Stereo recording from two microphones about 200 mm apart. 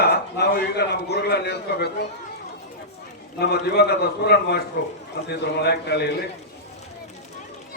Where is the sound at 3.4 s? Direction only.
55° left (ahead or behind).